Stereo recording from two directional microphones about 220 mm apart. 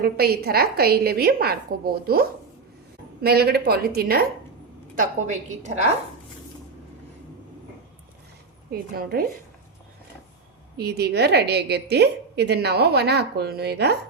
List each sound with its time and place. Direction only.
0.0 s a woman's voice: 45° right (ahead or behind)
8.7 s a woman's voice: 45° right (ahead or behind)
10.8 s a woman's voice: 45° right (ahead or behind)